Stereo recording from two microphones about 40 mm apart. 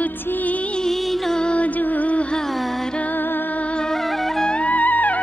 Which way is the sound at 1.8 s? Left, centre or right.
Left.